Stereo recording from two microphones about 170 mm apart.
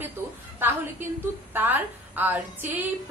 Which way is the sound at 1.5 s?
10° right (ahead or behind).